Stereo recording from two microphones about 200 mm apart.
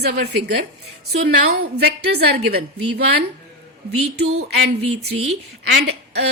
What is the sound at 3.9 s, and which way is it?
Speech, 90° right.